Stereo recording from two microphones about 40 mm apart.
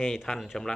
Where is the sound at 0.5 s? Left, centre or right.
Centre.